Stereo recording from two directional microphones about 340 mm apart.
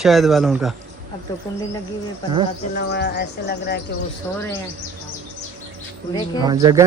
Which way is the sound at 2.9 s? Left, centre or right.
Left.